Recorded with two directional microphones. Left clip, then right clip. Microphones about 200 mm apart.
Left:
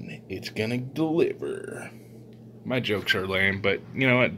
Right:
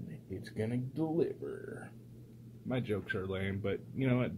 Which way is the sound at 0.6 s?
10° left (ahead or behind).